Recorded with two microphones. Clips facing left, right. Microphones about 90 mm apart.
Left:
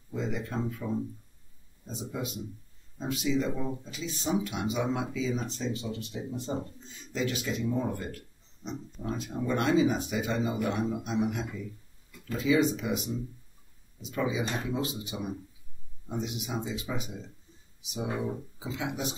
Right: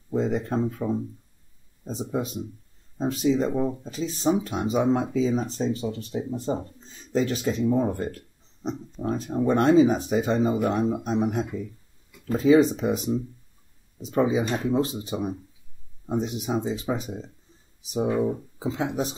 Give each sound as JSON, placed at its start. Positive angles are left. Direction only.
{"t": 0.1, "sound": "speech", "side_deg": -40}